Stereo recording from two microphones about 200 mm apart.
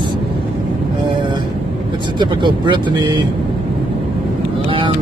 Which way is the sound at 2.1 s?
20° right (ahead or behind).